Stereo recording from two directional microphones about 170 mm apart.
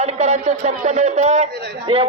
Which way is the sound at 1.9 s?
30° right (ahead or behind).